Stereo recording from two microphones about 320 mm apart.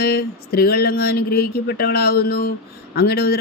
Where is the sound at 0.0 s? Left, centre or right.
Left.